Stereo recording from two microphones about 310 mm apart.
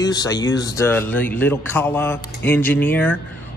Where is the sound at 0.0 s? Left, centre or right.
Centre.